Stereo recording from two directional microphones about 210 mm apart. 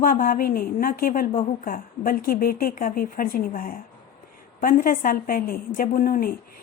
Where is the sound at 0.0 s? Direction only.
40° left (ahead or behind).